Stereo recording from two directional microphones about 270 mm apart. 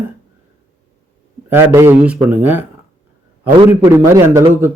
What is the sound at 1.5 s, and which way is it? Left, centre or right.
A man's voice, centre.